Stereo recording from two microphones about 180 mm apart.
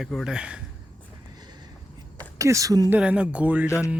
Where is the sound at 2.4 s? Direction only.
20° right (ahead or behind).